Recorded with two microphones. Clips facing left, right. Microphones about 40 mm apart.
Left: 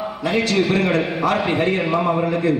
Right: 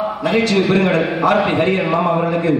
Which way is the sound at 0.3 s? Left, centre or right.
Centre.